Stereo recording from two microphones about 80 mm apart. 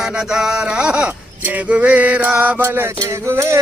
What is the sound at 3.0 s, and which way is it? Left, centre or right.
Music, right.